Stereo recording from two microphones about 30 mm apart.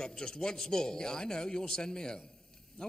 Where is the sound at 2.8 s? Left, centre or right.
Left.